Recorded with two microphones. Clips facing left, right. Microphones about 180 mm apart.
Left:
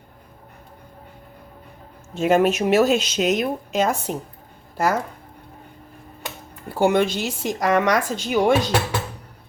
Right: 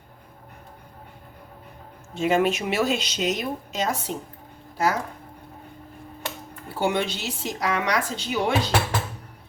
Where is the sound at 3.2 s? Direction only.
55° left (ahead or behind).